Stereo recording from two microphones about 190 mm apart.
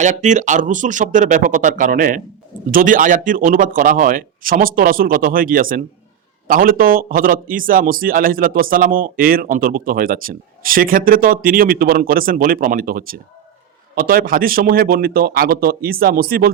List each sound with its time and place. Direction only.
0.0 s a man's voice: 40° right (ahead or behind)